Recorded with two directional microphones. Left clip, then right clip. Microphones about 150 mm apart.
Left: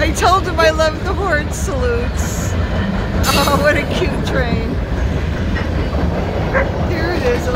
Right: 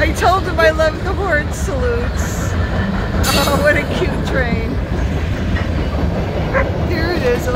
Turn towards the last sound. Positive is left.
turn(degrees=-20)  # may be behind; listen again after turning